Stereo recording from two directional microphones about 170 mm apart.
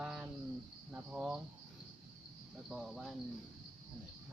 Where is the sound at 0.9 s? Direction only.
5° right (ahead or behind).